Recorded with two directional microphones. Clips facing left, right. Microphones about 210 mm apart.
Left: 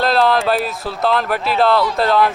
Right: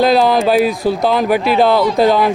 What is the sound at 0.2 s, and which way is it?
Speech, centre (ahead or behind).